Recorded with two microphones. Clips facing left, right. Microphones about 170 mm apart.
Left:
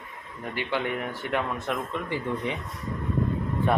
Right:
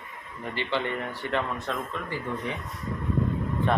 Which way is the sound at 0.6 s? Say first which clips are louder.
Left 1 dB; 10° left (ahead or behind).